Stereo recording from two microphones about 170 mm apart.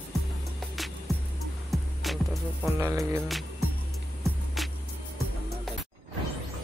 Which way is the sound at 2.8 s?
20° right (ahead or behind).